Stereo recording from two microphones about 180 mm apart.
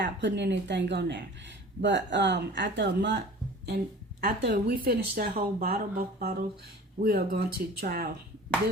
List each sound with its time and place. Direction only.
0.0 s speech: 75° right (ahead or behind)
4.2 s speech: 65° right (ahead or behind)